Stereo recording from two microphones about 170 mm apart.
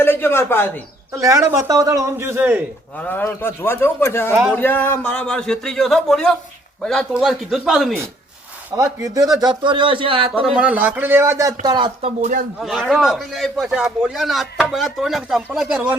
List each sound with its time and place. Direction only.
0.0 s speech: 15° left (ahead or behind)
1.2 s a man's voice: 20° right (ahead or behind)
3.0 s a man's voice: 10° left (ahead or behind)
8.7 s a man's voice: 20° right (ahead or behind)
10.4 s a man's voice: 5° right (ahead or behind); by 11.9 s 25° right (ahead or behind)
12.0 s speech: 45° right (ahead or behind)
12.6 s a man's voice: centre (ahead or behind)